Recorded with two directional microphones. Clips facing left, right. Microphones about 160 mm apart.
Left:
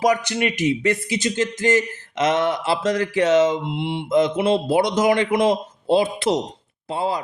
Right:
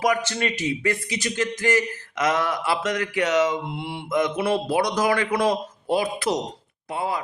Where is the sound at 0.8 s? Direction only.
30° left (ahead or behind).